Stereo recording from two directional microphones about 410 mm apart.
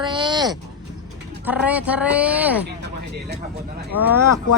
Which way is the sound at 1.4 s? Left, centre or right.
Centre.